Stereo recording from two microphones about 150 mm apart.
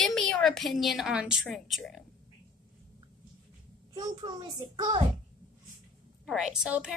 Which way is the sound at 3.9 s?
30° right (ahead or behind).